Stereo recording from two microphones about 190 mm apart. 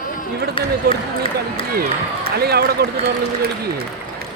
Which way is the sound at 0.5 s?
30° left (ahead or behind).